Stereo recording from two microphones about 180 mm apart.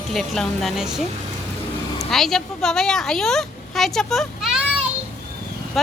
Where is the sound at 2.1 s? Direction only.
Centre (ahead or behind).